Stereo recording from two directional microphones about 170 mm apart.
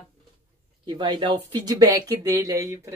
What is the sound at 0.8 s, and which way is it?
Speech, 25° right (ahead or behind).